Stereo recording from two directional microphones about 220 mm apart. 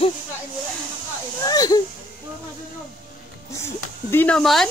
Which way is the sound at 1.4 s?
15° left (ahead or behind).